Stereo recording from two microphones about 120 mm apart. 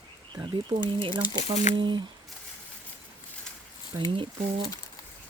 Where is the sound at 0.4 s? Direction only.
40° right (ahead or behind).